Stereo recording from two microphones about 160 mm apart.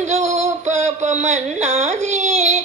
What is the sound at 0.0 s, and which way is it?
Synthetic singing, 45° right (ahead or behind).